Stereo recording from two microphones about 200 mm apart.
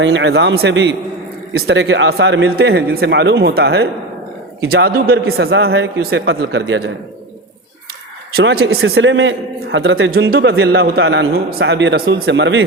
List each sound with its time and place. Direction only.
0.0 s a man's voice: 65° right (ahead or behind)
5.2 s a man's voice: 65° right (ahead or behind)
8.4 s a man's voice: 55° right (ahead or behind)
8.8 s a man's voice: 70° right (ahead or behind)